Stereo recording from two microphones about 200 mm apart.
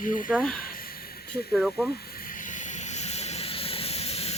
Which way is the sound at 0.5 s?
45° left (ahead or behind).